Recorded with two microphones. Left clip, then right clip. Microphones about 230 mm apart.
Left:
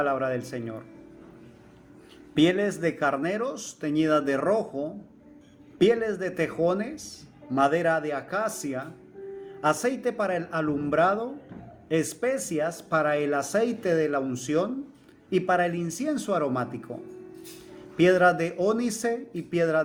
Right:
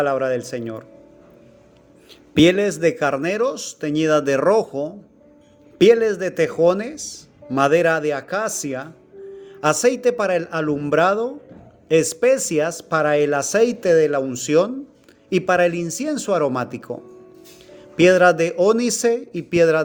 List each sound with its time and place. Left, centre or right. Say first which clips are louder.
0.0 s speech: right 7 dB; right
2.3 s speech: right 8 dB; right
17.9 s speech: right 7 dB; right